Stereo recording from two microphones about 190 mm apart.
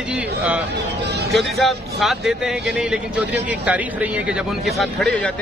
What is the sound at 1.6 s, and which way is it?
Speech, centre (ahead or behind).